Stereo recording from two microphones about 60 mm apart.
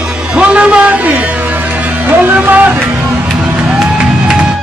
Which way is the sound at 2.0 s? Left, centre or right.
Right.